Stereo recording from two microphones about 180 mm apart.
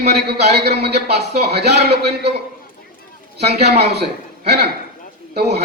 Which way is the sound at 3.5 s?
65° right (ahead or behind).